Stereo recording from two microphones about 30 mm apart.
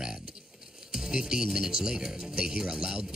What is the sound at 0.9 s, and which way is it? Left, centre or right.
A man's voice, right.